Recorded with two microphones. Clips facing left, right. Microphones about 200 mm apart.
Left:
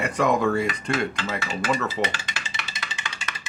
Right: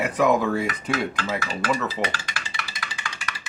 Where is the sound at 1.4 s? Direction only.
25° left (ahead or behind).